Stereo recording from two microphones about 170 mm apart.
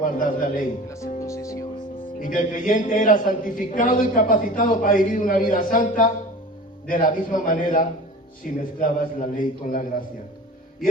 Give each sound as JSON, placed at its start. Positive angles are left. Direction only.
{"t": 0.0, "sound": "a man's voice", "side_deg": 55}
{"t": 1.3, "sound": "speech", "side_deg": 20}
{"t": 2.1, "sound": "a man's voice", "side_deg": 55}